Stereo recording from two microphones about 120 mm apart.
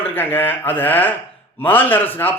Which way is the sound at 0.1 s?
15° left (ahead or behind).